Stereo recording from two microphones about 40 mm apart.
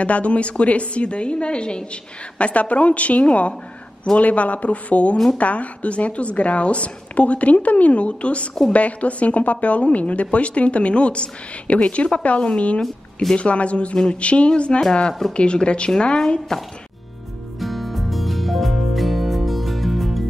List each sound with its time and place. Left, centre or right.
0.0 s a woman's voice: left
12.8 s speech: centre
13.4 s a woman's voice: left
17.6 s music: centre